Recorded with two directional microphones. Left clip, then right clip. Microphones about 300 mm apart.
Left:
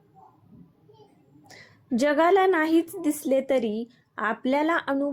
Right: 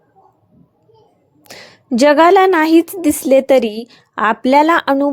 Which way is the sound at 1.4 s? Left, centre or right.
Right.